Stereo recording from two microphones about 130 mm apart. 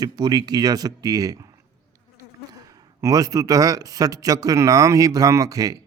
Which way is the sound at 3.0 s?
25° right (ahead or behind).